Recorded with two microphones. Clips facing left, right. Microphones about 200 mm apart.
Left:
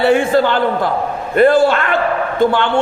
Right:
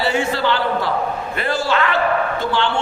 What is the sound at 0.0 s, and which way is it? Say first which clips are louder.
A man's voice: left 7 dB; 55° left (ahead or behind).